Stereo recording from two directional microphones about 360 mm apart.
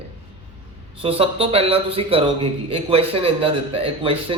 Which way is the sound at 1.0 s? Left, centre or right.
Centre.